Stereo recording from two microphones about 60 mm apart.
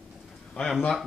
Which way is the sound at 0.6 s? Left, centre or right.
Left.